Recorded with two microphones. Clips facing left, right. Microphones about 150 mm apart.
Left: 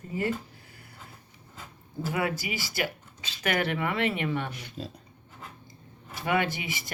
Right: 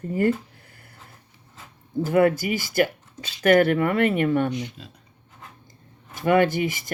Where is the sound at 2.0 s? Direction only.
50° right (ahead or behind).